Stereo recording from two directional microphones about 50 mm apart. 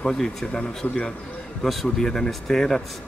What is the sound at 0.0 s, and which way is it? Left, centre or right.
Speech, centre.